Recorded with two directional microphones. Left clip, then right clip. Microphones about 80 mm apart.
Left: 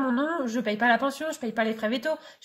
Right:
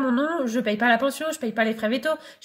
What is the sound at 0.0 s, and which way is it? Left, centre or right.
Speech, right.